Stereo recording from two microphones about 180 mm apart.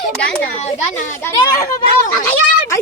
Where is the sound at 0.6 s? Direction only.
40° left (ahead or behind).